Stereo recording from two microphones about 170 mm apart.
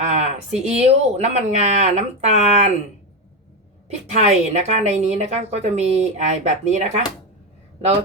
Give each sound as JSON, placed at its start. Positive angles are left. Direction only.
{"t": 0.0, "sound": "speech", "side_deg": -40}
{"t": 4.1, "sound": "a woman's voice", "side_deg": -45}